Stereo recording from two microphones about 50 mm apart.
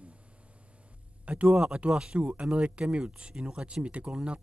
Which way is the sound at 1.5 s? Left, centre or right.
Centre.